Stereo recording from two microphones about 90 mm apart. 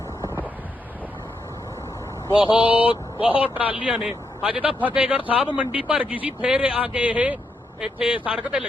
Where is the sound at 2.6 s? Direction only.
75° left (ahead or behind).